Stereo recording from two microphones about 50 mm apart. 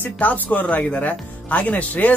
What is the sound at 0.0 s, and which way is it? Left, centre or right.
Speech, left.